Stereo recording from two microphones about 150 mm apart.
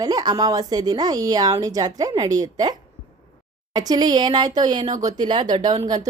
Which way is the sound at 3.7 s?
25° right (ahead or behind).